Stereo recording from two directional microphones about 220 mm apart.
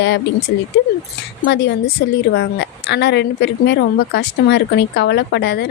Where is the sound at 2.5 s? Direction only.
50° left (ahead or behind).